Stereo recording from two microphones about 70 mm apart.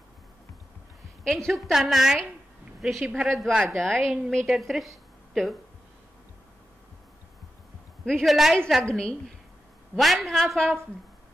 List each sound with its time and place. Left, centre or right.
1.2 s a woman's voice: centre
8.0 s a woman's voice: centre
8.8 s a woman's voice: centre
9.9 s a woman's voice: centre